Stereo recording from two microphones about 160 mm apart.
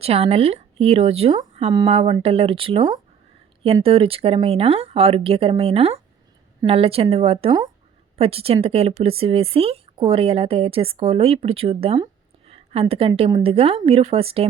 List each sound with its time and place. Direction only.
0.0 s a woman's voice: 40° right (ahead or behind)